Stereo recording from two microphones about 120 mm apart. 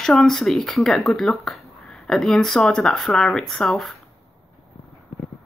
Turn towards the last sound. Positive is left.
turn(degrees=0)  # may be behind; listen again after turning